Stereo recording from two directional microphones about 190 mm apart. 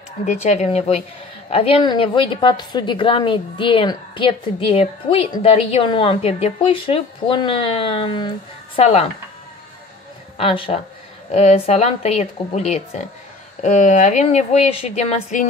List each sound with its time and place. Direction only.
0.2 s a woman's voice: 35° left (ahead or behind)
10.3 s speech: 30° left (ahead or behind)